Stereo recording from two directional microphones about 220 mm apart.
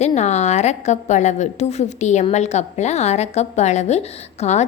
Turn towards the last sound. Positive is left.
turn(degrees=30)  # may be behind; listen again after turning